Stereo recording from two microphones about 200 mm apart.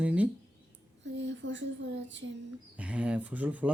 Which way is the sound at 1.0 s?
65° right (ahead or behind).